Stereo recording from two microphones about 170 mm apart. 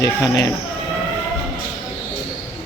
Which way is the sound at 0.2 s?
20° left (ahead or behind).